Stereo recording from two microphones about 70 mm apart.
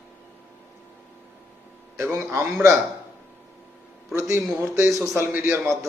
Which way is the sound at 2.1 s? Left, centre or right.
Right.